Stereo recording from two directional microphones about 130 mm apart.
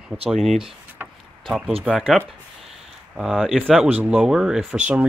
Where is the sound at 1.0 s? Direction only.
15° right (ahead or behind).